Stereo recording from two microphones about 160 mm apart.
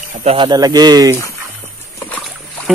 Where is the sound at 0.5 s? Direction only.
25° right (ahead or behind).